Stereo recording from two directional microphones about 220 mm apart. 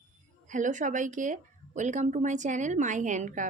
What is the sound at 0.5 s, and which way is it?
A woman's voice, 35° right (ahead or behind).